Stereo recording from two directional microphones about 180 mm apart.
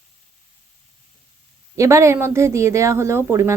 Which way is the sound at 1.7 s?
15° right (ahead or behind).